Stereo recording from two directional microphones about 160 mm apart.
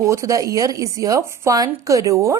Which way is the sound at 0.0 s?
20° right (ahead or behind).